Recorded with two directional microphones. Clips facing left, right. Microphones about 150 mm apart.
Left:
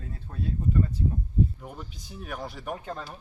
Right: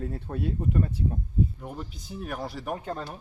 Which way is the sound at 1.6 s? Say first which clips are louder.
Right 3 dB; centre (ahead or behind).